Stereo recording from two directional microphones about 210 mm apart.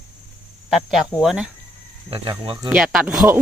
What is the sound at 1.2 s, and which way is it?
Speech, centre (ahead or behind).